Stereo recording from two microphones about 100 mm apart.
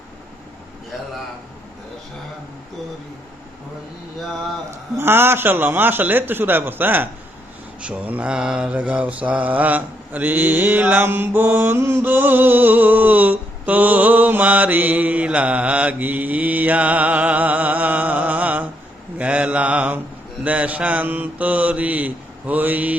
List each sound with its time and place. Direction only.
4.9 s a man's voice: 25° right (ahead or behind)
7.8 s mantra: 15° right (ahead or behind)